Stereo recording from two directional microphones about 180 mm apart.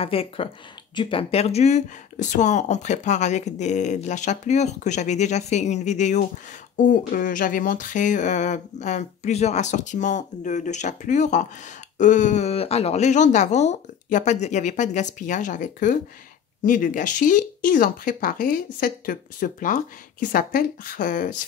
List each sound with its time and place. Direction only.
0.0 s speech: 30° left (ahead or behind); by 21.4 s 50° left (ahead or behind)